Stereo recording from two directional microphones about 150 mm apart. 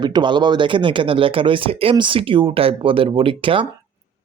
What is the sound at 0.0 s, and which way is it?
Speech, 30° right (ahead or behind).